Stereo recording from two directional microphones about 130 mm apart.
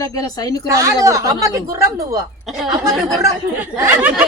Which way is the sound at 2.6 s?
Centre (ahead or behind).